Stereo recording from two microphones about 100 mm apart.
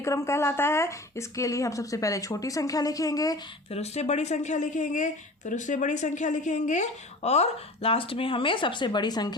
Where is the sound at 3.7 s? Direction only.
90° left.